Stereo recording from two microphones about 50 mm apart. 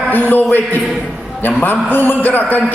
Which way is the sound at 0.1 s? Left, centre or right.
Left.